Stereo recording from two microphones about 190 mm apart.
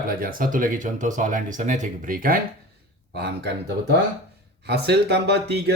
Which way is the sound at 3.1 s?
60° right (ahead or behind).